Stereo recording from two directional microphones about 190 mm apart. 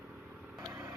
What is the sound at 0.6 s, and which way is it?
Vehicle, 15° right (ahead or behind).